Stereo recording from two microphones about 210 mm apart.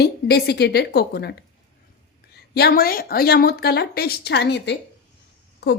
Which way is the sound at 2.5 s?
50° left (ahead or behind).